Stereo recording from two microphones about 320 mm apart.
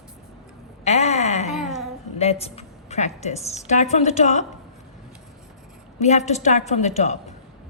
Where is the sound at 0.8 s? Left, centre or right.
Centre.